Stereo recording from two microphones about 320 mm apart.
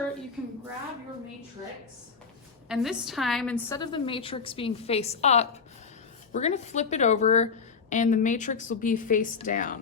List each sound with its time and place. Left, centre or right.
2.6 s a woman's voice: centre; by 9.7 s left